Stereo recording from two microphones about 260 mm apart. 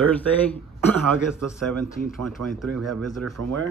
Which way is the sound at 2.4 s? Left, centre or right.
Right.